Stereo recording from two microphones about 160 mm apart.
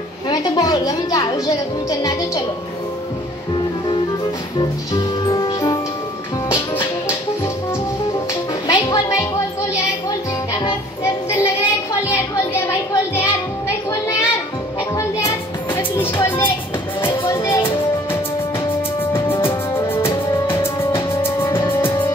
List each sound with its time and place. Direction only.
0.3 s a woman's voice: 25° left (ahead or behind)
4.6 s music: 25° left (ahead or behind)
8.6 s music: 25° left (ahead or behind)
11.2 s child singing: 15° left (ahead or behind)
12.6 s a sound: 15° left (ahead or behind)
15.0 s music: 20° left (ahead or behind)
17.0 s music: 30° left (ahead or behind)
17.3 s music: 15° left (ahead or behind)
19.1 s music: 15° left (ahead or behind)